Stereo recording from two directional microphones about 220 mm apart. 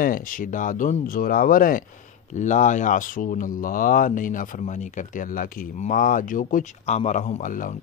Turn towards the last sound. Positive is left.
turn(degrees=35)  # may be behind; listen again after turning